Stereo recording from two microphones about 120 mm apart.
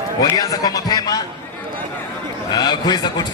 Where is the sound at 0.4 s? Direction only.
30° left (ahead or behind).